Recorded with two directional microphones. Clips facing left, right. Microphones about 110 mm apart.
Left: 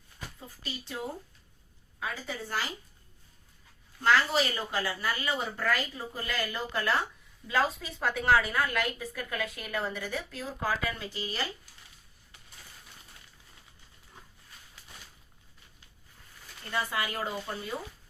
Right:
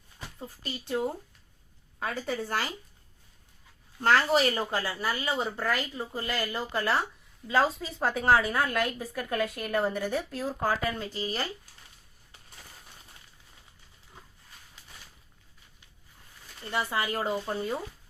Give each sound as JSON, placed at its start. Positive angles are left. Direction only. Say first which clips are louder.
{"t": 0.3, "sound": "a woman's voice", "louder": "right 5 dB", "side_deg": -40}
{"t": 2.0, "sound": "a woman's voice", "louder": "right 5 dB", "side_deg": -55}
{"t": 4.0, "sound": "a woman's voice", "louder": "right 3 dB", "side_deg": -40}
{"t": 16.7, "sound": "a woman's voice", "louder": "right 3 dB", "side_deg": -30}